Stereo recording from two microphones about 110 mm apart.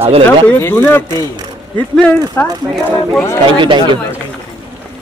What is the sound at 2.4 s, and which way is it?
Speech, 20° left (ahead or behind).